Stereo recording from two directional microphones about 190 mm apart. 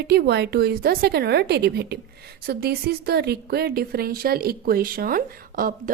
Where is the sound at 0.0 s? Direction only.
60° right (ahead or behind).